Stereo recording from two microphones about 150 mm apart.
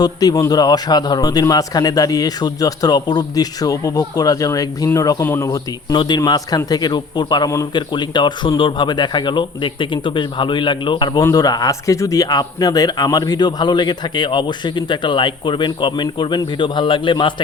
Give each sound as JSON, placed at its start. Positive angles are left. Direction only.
{"t": 0.0, "sound": "speech", "side_deg": 25}
{"t": 5.5, "sound": "a man's voice", "side_deg": 30}